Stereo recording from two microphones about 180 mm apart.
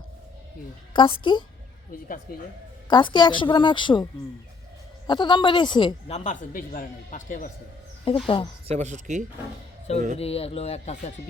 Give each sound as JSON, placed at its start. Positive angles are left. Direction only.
{"t": 0.9, "sound": "a woman's voice", "side_deg": 30}
{"t": 2.3, "sound": "speech", "side_deg": 55}
{"t": 2.9, "sound": "a woman's voice", "side_deg": 25}
{"t": 5.0, "sound": "a woman's voice", "side_deg": 25}
{"t": 6.1, "sound": "a man's voice", "side_deg": 40}
{"t": 8.1, "sound": "speech", "side_deg": 35}
{"t": 8.6, "sound": "speech", "side_deg": -40}
{"t": 10.2, "sound": "speech", "side_deg": 35}